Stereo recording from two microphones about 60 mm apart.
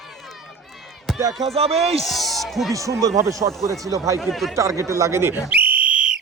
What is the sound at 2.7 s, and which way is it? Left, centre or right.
Speech, right.